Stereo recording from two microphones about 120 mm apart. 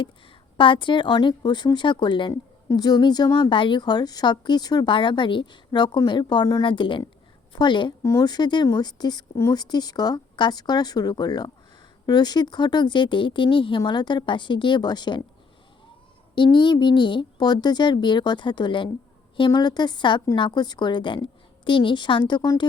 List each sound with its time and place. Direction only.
0.5 s a woman's voice: 45° left (ahead or behind)
8.0 s speech: 25° left (ahead or behind)
8.3 s a woman's voice: 40° left (ahead or behind)
16.3 s a woman's voice: 40° left (ahead or behind)